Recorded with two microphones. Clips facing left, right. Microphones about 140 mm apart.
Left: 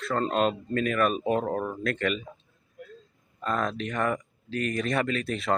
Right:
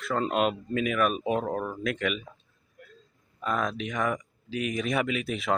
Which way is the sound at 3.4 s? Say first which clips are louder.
Left 1 dB; 5° right (ahead or behind).